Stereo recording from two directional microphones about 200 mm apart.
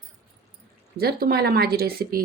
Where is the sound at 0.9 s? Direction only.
50° right (ahead or behind).